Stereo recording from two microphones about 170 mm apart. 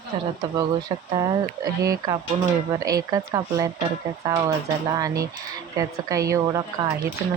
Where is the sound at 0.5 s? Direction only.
25° right (ahead or behind).